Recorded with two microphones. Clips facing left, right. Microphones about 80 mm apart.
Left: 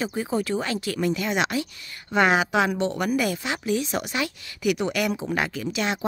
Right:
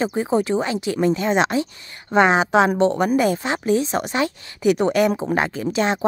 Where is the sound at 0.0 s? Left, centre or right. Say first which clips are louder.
Right 6 dB; right.